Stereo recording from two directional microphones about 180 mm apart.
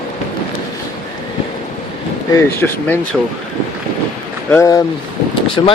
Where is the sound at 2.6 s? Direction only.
5° left (ahead or behind).